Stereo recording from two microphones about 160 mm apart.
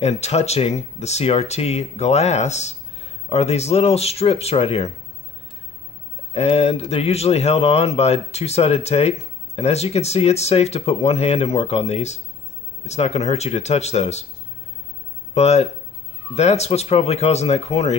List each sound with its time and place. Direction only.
0.0 s speech: 40° left (ahead or behind)
6.3 s speech: 40° left (ahead or behind)
15.3 s speech: 40° left (ahead or behind)